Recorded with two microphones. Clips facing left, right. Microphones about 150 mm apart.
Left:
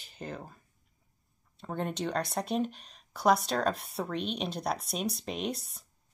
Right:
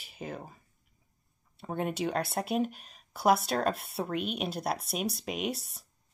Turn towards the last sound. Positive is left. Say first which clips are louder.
# right 1 dB
turn(degrees=-5)  # may be behind; listen again after turning